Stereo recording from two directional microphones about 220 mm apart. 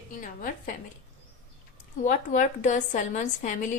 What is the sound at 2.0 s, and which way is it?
A woman's voice, 35° left (ahead or behind).